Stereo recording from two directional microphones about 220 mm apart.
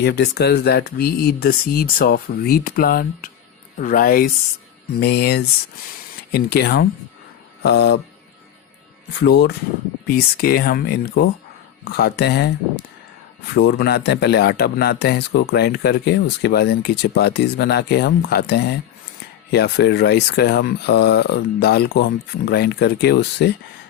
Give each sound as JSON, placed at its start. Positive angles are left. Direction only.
{"t": 0.0, "sound": "speech", "side_deg": 50}
{"t": 9.1, "sound": "speech", "side_deg": 50}